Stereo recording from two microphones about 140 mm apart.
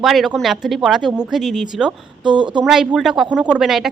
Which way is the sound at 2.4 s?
35° right (ahead or behind).